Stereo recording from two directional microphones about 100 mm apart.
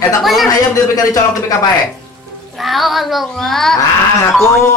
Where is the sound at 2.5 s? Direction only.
Centre (ahead or behind).